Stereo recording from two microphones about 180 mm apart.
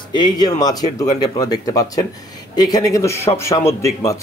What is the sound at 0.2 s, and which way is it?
A man's voice, 20° left (ahead or behind).